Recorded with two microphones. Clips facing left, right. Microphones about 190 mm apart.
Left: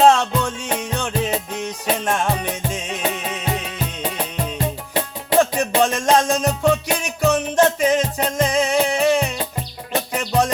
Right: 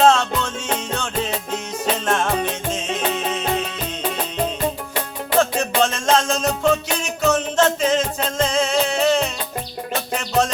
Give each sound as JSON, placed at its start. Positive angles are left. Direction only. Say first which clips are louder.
{"t": 0.0, "sound": "music", "louder": "left 1 dB", "side_deg": 15}
{"t": 4.5, "sound": "music", "louder": "even", "side_deg": 25}
{"t": 5.5, "sound": "music", "louder": "left 2 dB", "side_deg": 15}